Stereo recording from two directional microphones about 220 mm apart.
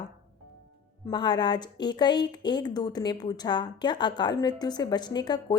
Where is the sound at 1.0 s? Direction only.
20° left (ahead or behind).